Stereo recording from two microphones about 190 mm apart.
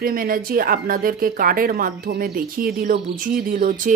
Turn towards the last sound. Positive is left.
turn(degrees=-45)  # may be behind; listen again after turning